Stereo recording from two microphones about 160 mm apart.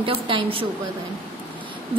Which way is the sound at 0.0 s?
35° right (ahead or behind).